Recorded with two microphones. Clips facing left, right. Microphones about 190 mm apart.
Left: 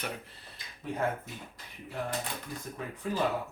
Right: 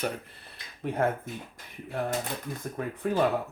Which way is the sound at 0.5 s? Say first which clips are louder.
Right 6 dB; 60° right (ahead or behind).